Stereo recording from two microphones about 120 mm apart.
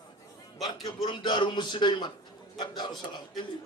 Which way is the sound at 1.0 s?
40° left (ahead or behind).